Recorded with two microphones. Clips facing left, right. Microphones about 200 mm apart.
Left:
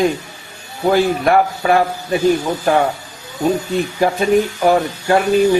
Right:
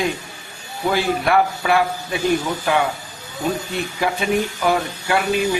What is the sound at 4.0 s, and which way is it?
Speech, 40° left (ahead or behind).